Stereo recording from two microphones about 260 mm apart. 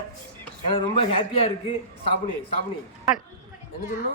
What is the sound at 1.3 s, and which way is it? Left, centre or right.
Speech, left.